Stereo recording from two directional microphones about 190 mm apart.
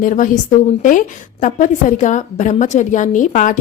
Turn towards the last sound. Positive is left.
turn(degrees=45)  # may be behind; listen again after turning